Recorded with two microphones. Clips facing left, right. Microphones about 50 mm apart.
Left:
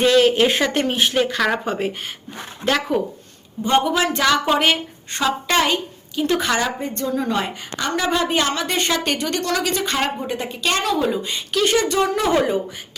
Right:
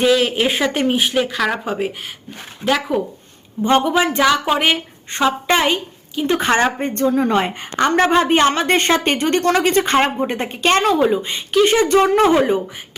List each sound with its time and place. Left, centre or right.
0.0 s speech: centre
3.8 s speech: centre
5.1 s a woman's voice: right
6.5 s a woman's voice: right
11.9 s a woman's voice: right
12.3 s a woman's voice: right